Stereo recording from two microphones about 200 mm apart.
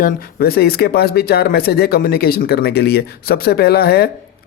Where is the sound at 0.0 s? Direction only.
50° left (ahead or behind).